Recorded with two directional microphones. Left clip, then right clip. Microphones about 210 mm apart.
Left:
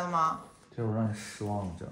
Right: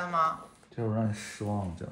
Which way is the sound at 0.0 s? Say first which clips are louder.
Right 1 dB; 15° left (ahead or behind).